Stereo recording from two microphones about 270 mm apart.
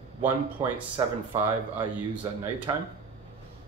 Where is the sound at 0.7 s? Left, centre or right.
Centre.